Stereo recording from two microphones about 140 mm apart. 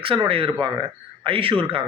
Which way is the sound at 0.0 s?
40° right (ahead or behind).